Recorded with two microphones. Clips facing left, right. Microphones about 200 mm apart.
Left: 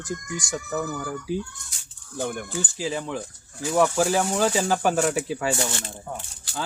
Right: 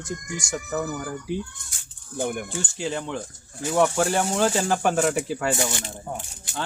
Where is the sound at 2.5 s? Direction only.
Centre (ahead or behind).